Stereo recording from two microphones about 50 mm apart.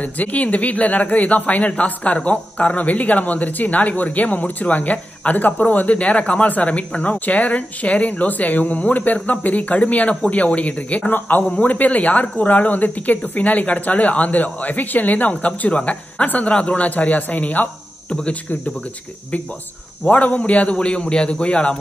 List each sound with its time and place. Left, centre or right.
0.0 s speech: left
20.1 s a man's voice: left